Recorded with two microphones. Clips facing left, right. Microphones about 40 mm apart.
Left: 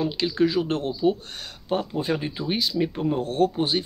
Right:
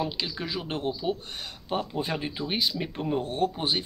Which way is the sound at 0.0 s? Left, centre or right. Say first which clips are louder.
Left 9 dB; centre.